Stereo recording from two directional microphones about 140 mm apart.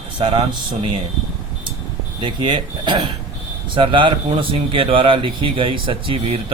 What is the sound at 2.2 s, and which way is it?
Speech, 35° right (ahead or behind).